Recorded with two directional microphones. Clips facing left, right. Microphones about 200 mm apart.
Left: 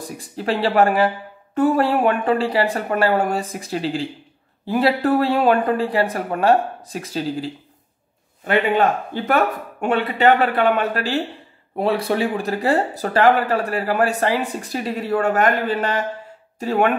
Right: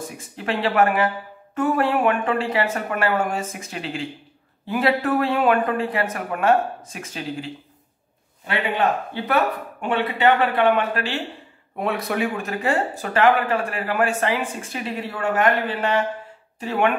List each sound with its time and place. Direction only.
0.2 s speech: 35° left (ahead or behind)
8.5 s speech: 45° left (ahead or behind)